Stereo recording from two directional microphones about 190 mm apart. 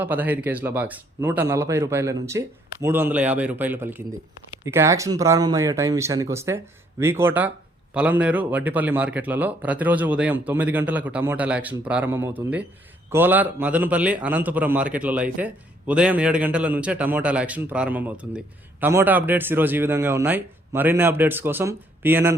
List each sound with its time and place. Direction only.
0.0 s a man's voice: 10° right (ahead or behind)